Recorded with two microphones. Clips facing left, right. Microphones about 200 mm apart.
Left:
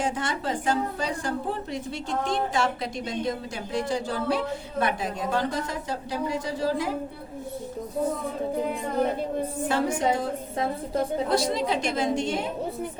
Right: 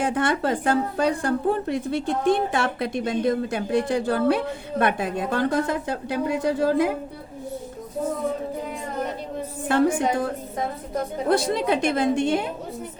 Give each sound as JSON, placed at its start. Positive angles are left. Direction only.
{"t": 0.0, "sound": "a woman's voice", "side_deg": -55}
{"t": 9.6, "sound": "a woman's voice", "side_deg": -55}